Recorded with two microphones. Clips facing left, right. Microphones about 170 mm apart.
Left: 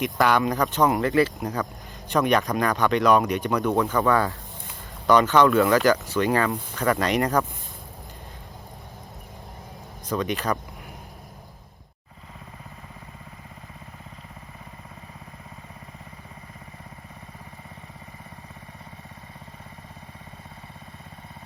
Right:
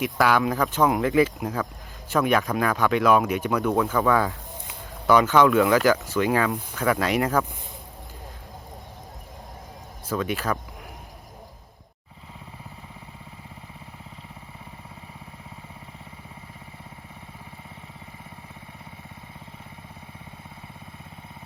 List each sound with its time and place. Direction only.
0.0 s speech: 5° right (ahead or behind)
10.1 s speech: 5° right (ahead or behind)